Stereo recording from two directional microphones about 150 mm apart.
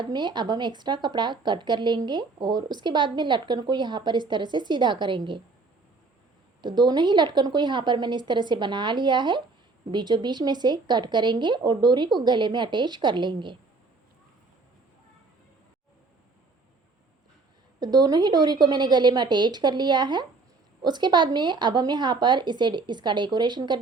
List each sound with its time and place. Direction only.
0.0 s a woman's voice: 30° right (ahead or behind)
6.6 s a woman's voice: 30° right (ahead or behind)
17.7 s a woman's voice: 25° right (ahead or behind)